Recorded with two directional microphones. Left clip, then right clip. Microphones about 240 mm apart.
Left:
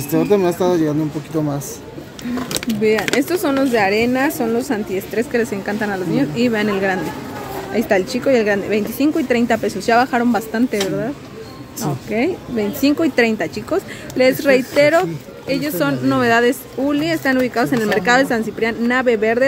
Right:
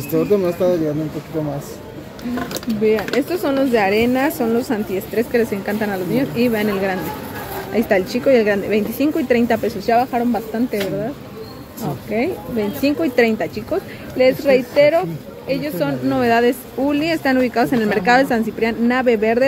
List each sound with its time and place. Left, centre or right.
0.1 s speech: left
3.2 s a woman's voice: centre